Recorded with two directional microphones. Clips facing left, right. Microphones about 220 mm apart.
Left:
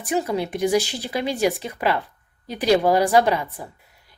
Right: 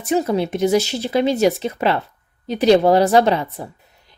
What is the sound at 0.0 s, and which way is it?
Speech, 20° right (ahead or behind).